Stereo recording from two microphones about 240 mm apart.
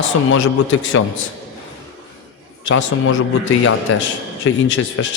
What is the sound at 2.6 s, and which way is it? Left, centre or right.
Speech, left.